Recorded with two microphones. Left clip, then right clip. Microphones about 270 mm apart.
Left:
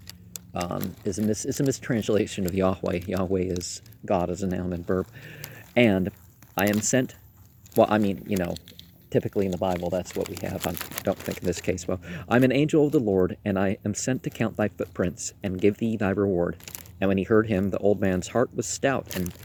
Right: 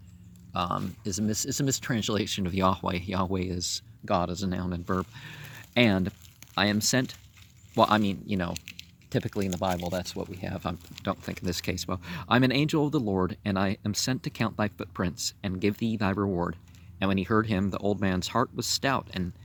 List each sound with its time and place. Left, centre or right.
0.1 s speech: right